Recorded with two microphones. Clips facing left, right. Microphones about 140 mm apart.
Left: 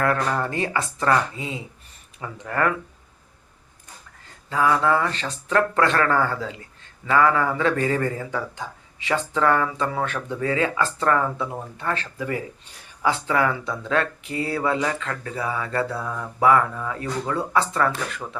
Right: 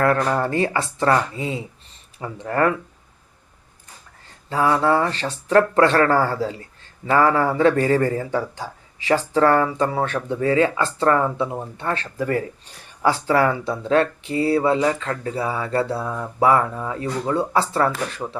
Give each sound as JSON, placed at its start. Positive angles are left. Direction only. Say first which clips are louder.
{"t": 0.0, "sound": "a man's voice", "louder": "right 4 dB", "side_deg": -30}
{"t": 4.4, "sound": "a man's voice", "louder": "right 2 dB", "side_deg": -30}
{"t": 12.1, "sound": "speech", "louder": "right 5 dB", "side_deg": -45}